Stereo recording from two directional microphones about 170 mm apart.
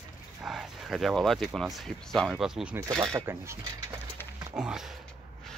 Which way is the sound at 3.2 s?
15° right (ahead or behind).